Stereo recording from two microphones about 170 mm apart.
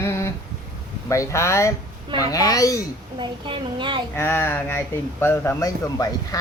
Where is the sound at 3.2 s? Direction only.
30° right (ahead or behind).